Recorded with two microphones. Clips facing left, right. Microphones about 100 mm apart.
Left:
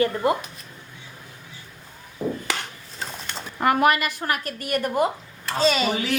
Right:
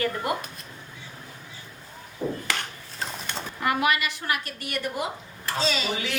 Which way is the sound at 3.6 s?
45° left (ahead or behind).